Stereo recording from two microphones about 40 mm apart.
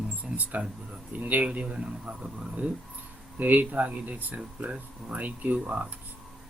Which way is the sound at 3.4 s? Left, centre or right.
Right.